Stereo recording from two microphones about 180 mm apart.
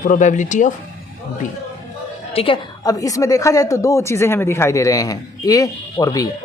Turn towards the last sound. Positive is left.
turn(degrees=20)  # may be behind; listen again after turning